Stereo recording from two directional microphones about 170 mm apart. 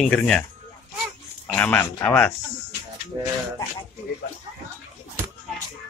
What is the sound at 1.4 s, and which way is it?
Speech, 10° left (ahead or behind).